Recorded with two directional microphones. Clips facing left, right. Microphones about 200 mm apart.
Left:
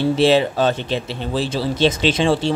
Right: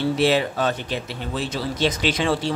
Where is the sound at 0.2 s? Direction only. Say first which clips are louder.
Left 6 dB; 25° left (ahead or behind).